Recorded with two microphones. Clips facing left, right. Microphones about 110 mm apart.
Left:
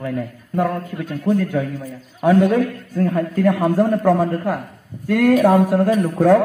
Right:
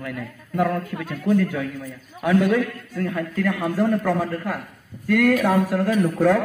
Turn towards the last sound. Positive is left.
turn(degrees=25)  # may be behind; listen again after turning